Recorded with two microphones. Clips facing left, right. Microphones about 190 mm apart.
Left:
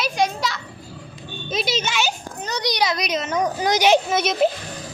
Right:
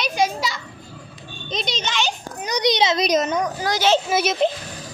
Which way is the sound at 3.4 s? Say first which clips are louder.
Left 2 dB; 20° left (ahead or behind).